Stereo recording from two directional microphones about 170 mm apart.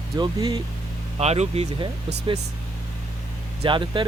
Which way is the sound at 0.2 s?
25° right (ahead or behind).